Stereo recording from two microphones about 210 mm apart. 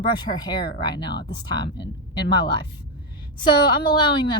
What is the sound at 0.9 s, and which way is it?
Speech, 50° left (ahead or behind).